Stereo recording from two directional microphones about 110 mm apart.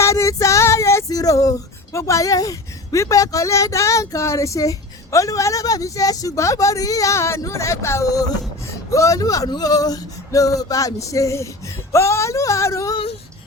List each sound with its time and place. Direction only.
0.0 s female singing: 25° left (ahead or behind)
8.9 s male singing: 30° left (ahead or behind)
11.9 s female singing: 25° left (ahead or behind)